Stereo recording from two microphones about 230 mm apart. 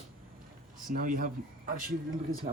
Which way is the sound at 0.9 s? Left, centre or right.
Right.